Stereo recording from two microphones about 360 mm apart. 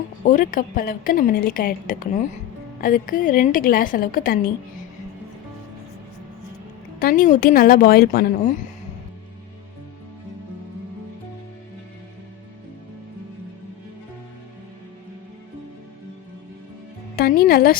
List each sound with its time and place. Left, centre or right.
0.3 s a woman's voice: left
7.0 s a woman's voice: left
17.2 s speech: left